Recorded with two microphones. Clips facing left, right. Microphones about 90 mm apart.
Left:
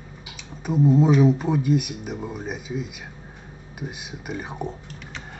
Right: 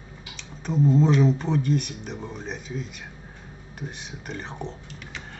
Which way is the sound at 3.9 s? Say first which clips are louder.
Left 3 dB; 10° left (ahead or behind).